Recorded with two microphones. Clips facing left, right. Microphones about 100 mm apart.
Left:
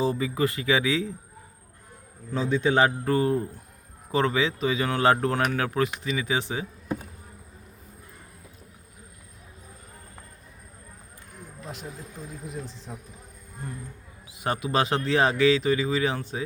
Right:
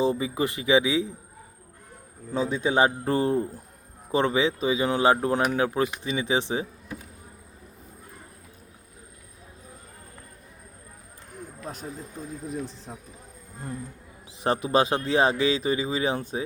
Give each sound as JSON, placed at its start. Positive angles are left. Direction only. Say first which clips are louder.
{"t": 0.0, "sound": "speech", "louder": "even", "side_deg": -20}
{"t": 2.3, "sound": "speech", "louder": "left 1 dB", "side_deg": -15}
{"t": 14.3, "sound": "speech", "louder": "right 3 dB", "side_deg": -30}